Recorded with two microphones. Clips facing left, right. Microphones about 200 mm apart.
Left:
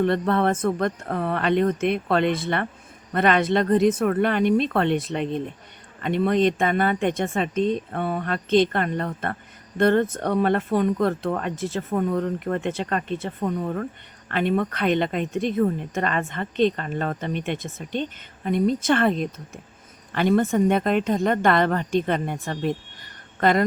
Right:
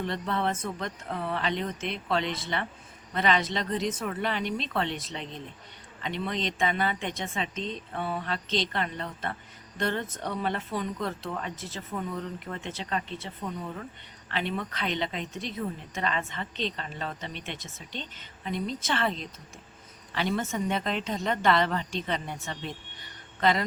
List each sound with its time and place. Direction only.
0.0 s speech: 55° left (ahead or behind)